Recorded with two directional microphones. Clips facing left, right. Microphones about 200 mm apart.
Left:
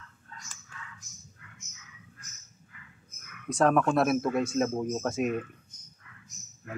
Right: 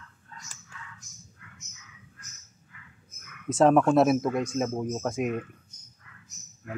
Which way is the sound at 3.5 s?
20° right (ahead or behind).